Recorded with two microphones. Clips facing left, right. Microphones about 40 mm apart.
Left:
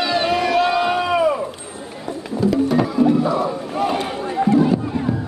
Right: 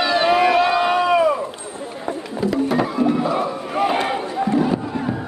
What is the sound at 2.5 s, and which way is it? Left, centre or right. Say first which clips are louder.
Music: left 1 dB; centre.